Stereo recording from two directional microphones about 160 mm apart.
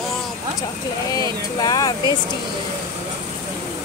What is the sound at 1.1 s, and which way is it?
Speech, 25° left (ahead or behind).